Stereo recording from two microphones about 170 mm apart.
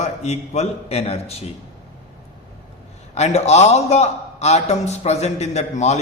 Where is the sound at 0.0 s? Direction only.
40° left (ahead or behind).